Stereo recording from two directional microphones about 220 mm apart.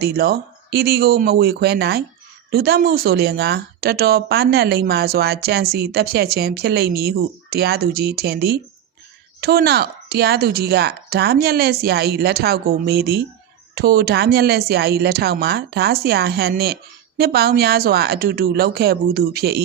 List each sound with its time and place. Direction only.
0.0 s speech: 45° right (ahead or behind)